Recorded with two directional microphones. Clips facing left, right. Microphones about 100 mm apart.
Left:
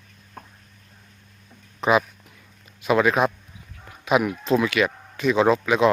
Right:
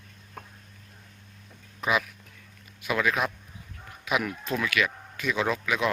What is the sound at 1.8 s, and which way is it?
Speech, 30° left (ahead or behind).